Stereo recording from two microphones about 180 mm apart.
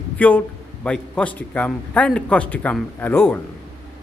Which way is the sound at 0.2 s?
10° left (ahead or behind).